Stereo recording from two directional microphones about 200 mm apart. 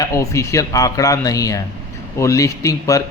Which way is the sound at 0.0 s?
15° left (ahead or behind).